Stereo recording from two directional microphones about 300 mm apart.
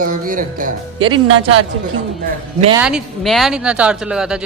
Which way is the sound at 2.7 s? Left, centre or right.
Centre.